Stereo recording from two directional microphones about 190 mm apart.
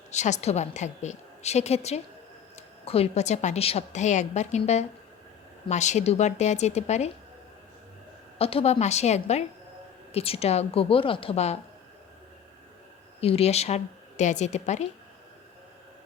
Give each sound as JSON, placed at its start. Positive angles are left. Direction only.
{"t": 0.1, "sound": "a woman's voice", "side_deg": 35}
{"t": 8.4, "sound": "a woman's voice", "side_deg": 30}
{"t": 13.2, "sound": "a woman's voice", "side_deg": 30}